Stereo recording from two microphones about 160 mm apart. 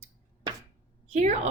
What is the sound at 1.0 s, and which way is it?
Speech, 45° right (ahead or behind).